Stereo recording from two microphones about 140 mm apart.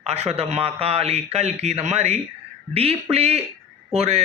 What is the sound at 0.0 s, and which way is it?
Speech, 50° right (ahead or behind).